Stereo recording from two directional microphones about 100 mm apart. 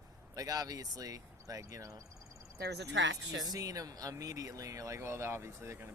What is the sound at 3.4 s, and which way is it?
Speech, 35° right (ahead or behind).